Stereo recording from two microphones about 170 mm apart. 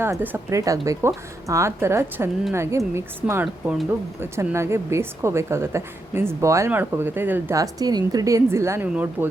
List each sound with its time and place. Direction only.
0.0 s a woman's voice: 10° right (ahead or behind)